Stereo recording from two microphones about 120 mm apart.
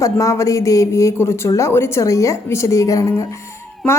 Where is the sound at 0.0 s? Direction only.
25° left (ahead or behind).